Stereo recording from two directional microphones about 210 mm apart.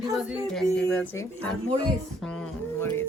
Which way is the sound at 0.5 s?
5° left (ahead or behind).